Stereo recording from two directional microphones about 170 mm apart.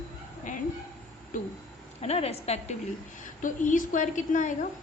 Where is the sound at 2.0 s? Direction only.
35° left (ahead or behind).